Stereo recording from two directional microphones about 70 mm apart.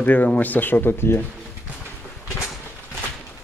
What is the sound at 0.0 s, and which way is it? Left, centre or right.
Speech, left.